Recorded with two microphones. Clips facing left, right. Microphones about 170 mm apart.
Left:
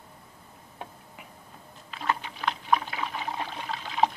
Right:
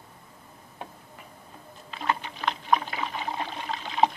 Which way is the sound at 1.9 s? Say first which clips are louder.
Right 1 dB; 5° left (ahead or behind).